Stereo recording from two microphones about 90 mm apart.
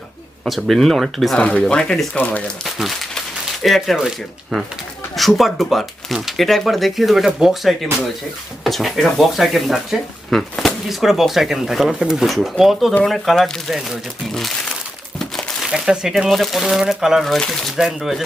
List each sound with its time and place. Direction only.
0.4 s speech: centre (ahead or behind); by 2.5 s 15° left (ahead or behind)
2.6 s speech: centre (ahead or behind)
5.1 s speech: centre (ahead or behind)
15.2 s crumpling: 10° left (ahead or behind)
15.6 s speech: 5° right (ahead or behind)